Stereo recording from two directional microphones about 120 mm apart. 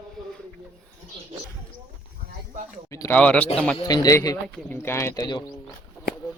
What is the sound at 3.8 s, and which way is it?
A man's voice, 35° left (ahead or behind).